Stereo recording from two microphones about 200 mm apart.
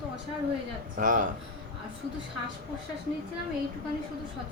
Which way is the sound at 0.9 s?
40° right (ahead or behind).